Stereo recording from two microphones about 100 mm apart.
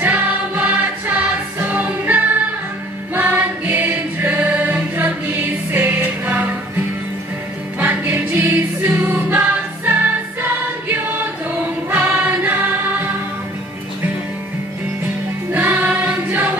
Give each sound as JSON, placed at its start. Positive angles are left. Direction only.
{"t": 0.0, "sound": "music", "side_deg": -15}
{"t": 3.2, "sound": "choir", "side_deg": -20}
{"t": 7.8, "sound": "music", "side_deg": -20}
{"t": 11.9, "sound": "music", "side_deg": -20}
{"t": 15.5, "sound": "choir", "side_deg": -20}